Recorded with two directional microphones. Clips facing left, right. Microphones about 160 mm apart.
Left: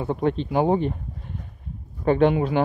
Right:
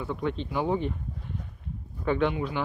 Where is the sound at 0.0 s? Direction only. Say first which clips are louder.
Left 7 dB; 45° left (ahead or behind).